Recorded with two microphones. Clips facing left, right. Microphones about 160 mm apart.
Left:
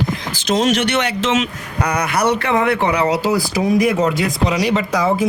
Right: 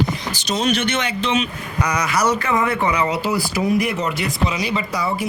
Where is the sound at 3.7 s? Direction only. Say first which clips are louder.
Left 6 dB; 90° left.